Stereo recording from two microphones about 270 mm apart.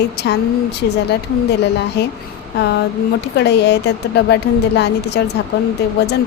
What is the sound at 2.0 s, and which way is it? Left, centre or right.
A woman's voice, left.